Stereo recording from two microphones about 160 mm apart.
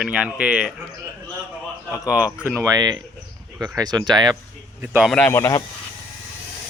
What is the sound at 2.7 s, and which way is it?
Speech, 25° right (ahead or behind).